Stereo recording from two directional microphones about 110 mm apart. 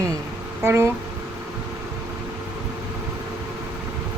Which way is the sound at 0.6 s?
25° right (ahead or behind).